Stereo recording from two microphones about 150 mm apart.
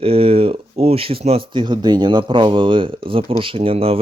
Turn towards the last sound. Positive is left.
turn(degrees=-40)  # may be behind; listen again after turning